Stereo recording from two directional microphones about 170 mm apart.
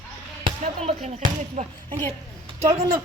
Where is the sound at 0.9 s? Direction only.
40° right (ahead or behind).